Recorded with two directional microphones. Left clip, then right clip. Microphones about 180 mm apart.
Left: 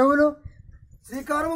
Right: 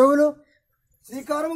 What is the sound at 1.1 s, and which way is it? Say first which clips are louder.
Speech: even; 5° left (ahead or behind).